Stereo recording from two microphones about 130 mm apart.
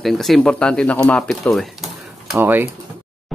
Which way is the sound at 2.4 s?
15° right (ahead or behind).